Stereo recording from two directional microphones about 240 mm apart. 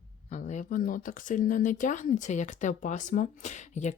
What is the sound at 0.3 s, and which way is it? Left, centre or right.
Speech, left.